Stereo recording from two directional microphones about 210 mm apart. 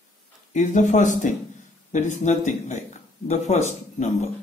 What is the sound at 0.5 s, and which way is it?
A man's voice, 35° left (ahead or behind).